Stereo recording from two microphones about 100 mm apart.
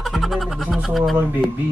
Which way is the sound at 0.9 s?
Centre (ahead or behind).